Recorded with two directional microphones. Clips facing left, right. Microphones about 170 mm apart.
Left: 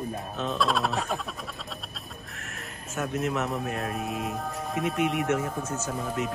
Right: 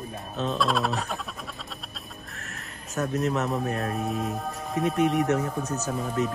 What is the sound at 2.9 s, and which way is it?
Speech, 40° right (ahead or behind).